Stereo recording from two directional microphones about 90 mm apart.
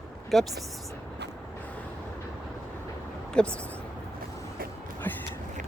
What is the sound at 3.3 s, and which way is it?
Speech, 10° left (ahead or behind).